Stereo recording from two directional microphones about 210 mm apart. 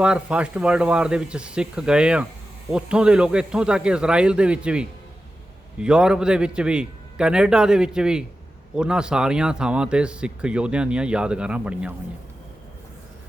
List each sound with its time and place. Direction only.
0.0 s speech: 5° right (ahead or behind)